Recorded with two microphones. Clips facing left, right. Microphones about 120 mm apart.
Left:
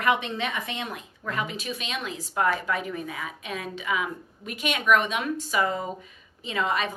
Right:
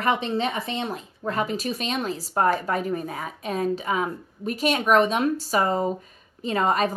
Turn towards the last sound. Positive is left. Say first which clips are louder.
# right 5 dB
turn(degrees=-40)  # may be behind; listen again after turning